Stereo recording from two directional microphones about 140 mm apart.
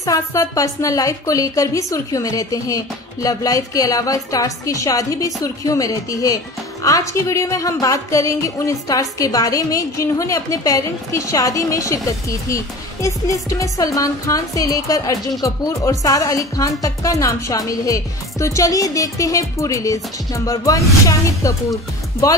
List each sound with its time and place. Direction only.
0.0 s a woman's voice: 25° left (ahead or behind)